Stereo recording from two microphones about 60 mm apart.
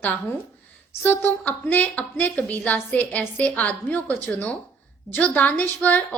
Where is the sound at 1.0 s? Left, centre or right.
Left.